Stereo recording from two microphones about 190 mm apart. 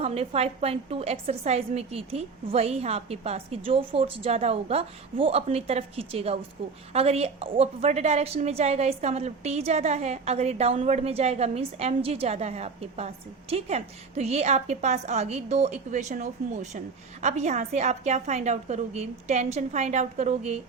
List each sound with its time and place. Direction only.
0.0 s a woman's voice: 30° right (ahead or behind)